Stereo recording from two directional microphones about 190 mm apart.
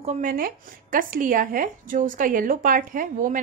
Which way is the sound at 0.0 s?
40° right (ahead or behind).